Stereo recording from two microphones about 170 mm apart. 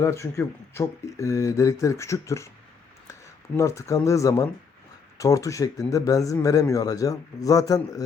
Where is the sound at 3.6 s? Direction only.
20° left (ahead or behind).